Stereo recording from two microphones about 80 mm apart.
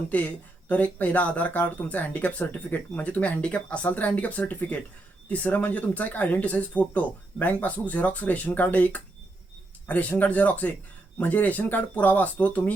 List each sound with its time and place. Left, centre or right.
0.1 s speech: centre